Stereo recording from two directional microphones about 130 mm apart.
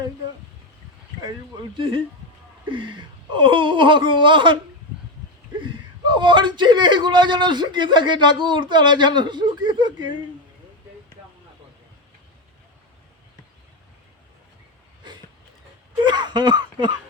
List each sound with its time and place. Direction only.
1.7 s speech: 40° right (ahead or behind)
5.5 s speech: 40° right (ahead or behind)
16.0 s throat clearing: 35° right (ahead or behind)